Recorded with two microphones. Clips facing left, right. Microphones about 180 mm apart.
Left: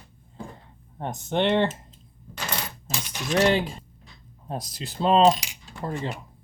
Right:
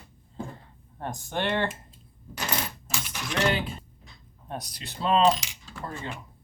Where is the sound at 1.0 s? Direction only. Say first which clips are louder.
Left 6 dB; 20° left (ahead or behind).